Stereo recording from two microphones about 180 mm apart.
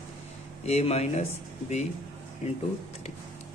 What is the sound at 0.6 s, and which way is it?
Speech, 35° left (ahead or behind).